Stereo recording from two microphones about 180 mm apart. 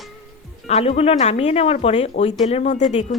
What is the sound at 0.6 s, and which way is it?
Speech, 35° left (ahead or behind).